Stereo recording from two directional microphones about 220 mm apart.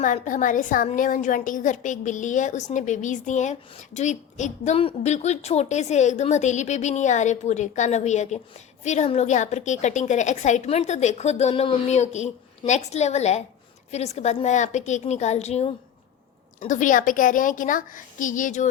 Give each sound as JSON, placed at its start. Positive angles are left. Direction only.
{"t": 0.0, "sound": "a woman's voice", "side_deg": 35}